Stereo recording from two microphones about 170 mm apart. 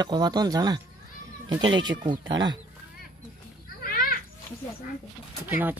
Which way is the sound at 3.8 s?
60° left (ahead or behind).